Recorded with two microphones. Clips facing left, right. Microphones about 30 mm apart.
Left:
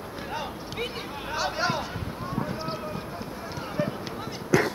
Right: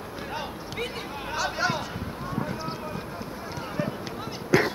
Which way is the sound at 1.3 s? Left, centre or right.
Centre.